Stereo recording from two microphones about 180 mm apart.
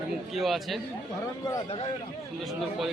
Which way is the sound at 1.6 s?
30° left (ahead or behind).